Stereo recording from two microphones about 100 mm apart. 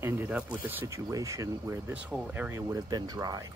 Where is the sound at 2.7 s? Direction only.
40° right (ahead or behind).